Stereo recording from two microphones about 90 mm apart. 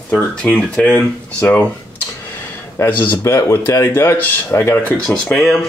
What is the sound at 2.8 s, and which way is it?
Speech, 30° left (ahead or behind).